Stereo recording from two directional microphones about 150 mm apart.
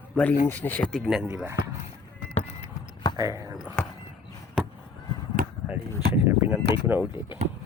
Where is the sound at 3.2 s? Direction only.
25° right (ahead or behind).